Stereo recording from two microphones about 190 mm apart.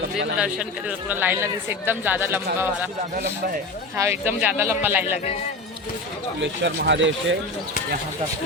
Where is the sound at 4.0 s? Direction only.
10° right (ahead or behind).